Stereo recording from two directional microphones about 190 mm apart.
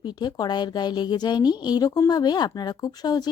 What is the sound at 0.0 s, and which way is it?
A woman's voice, 20° left (ahead or behind).